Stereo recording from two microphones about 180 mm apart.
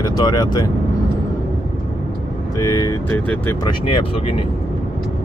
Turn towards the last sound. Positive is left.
turn(degrees=25)  # may be behind; listen again after turning